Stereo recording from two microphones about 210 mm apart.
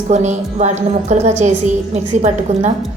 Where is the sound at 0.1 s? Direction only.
35° right (ahead or behind).